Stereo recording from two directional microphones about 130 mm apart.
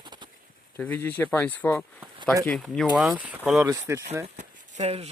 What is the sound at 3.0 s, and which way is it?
Speech, 10° right (ahead or behind).